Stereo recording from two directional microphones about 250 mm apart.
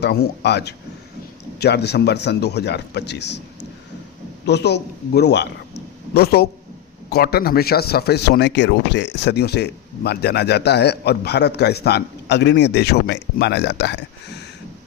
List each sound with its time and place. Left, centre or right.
0.0 s speech: left